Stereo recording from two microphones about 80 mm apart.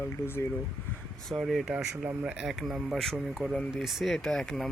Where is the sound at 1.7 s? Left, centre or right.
Centre.